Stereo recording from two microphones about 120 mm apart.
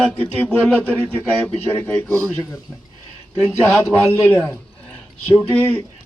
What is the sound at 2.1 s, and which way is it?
Speech, 5° left (ahead or behind).